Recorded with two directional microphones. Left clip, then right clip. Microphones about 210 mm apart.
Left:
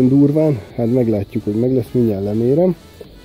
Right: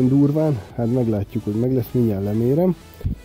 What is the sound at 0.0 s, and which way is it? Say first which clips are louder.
Speech: left 5 dB; 5° right (ahead or behind).